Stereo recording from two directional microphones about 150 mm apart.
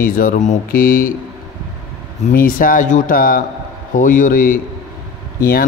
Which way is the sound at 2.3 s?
70° left (ahead or behind).